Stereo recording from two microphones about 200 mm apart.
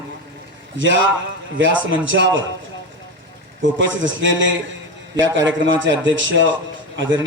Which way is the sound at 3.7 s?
65° right (ahead or behind).